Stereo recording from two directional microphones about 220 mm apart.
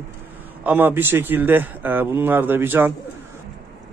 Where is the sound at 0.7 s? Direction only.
10° right (ahead or behind).